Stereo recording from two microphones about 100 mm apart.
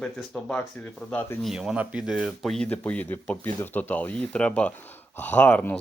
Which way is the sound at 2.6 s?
15° left (ahead or behind).